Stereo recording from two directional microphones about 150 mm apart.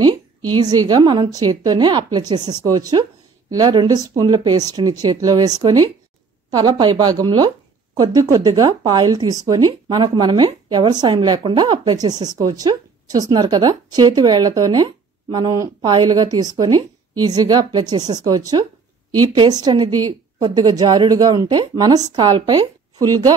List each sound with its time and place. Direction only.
0.0 s speech: 30° right (ahead or behind)